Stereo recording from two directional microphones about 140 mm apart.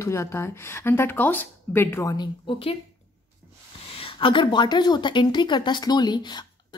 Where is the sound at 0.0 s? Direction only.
20° left (ahead or behind).